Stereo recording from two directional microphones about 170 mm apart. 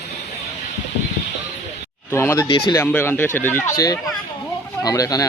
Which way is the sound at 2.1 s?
15° left (ahead or behind).